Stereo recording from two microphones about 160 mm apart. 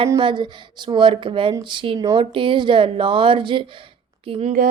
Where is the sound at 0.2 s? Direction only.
30° right (ahead or behind).